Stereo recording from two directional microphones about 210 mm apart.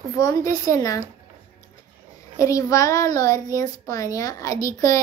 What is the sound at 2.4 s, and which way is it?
A woman's voice, 15° left (ahead or behind).